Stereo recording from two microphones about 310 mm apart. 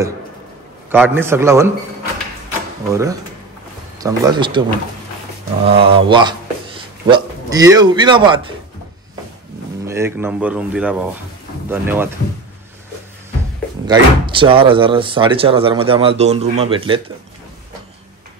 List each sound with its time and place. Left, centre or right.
0.9 s speech: centre
2.9 s speech: centre
5.7 s speech: centre
9.8 s speech: centre
13.8 s speech: centre